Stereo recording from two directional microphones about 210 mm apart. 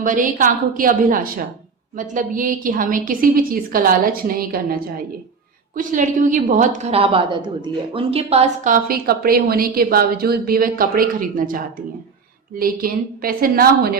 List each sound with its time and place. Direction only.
0.0 s a woman's voice: 40° right (ahead or behind)